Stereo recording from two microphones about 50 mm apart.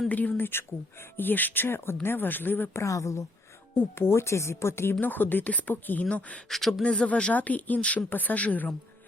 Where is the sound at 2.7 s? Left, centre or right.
Left.